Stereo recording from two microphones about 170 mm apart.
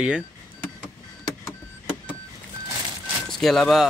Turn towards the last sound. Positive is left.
turn(degrees=0)  # may be behind; listen again after turning